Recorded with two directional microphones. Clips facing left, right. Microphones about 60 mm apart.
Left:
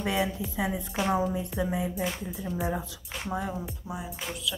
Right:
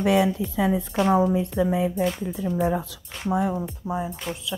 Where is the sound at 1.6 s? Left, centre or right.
Right.